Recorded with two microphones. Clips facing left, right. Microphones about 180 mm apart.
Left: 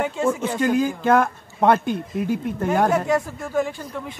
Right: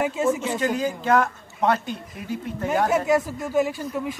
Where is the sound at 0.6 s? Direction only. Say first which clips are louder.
Left 4 dB; 50° left (ahead or behind).